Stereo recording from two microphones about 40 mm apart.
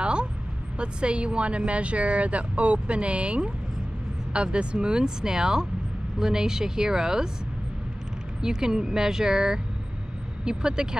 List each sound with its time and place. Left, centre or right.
0.0 s vehicle: right
0.7 s speech: right
8.4 s speech: centre